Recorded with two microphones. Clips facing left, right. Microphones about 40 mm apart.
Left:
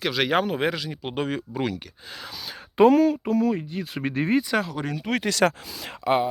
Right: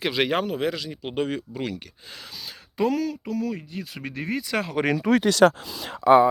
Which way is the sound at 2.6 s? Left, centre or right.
Left.